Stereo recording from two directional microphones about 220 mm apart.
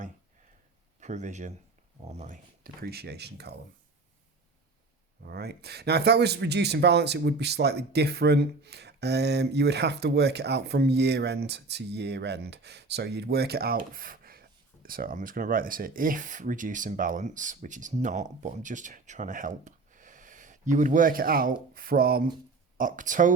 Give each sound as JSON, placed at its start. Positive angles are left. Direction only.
{"t": 0.9, "sound": "speech", "side_deg": -30}
{"t": 2.8, "sound": "speech", "side_deg": -45}
{"t": 5.2, "sound": "speech", "side_deg": -45}